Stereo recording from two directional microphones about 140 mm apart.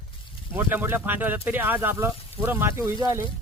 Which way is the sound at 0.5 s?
15° right (ahead or behind).